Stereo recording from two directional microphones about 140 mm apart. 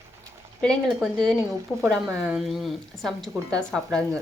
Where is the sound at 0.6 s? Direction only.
5° left (ahead or behind).